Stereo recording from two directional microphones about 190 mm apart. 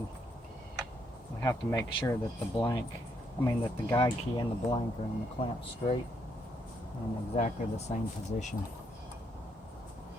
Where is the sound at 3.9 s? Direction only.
20° left (ahead or behind).